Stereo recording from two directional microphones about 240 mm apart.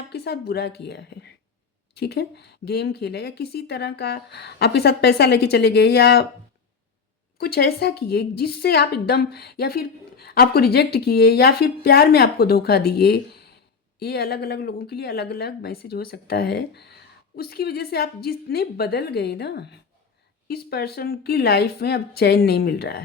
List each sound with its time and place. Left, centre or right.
0.1 s speech: left
7.3 s a woman's voice: left